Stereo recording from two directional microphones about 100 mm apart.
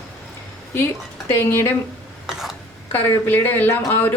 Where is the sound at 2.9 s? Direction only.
20° left (ahead or behind).